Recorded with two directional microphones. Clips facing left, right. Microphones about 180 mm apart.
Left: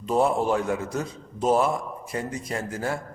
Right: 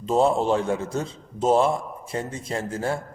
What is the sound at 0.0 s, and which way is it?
A man's voice, 25° right (ahead or behind).